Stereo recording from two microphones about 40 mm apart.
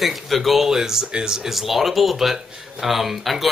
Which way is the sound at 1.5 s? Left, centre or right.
Centre.